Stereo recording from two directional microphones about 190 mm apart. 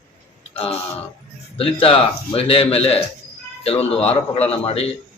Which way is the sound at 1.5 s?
30° left (ahead or behind).